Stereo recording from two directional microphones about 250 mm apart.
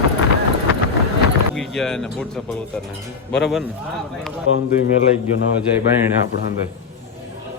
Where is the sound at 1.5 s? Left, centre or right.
Centre.